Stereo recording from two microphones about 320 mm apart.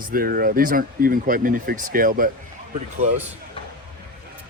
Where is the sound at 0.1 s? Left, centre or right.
Right.